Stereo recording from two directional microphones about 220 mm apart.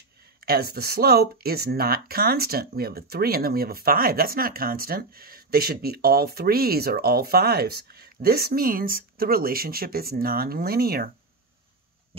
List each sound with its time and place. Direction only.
0.4 s speech: 45° right (ahead or behind)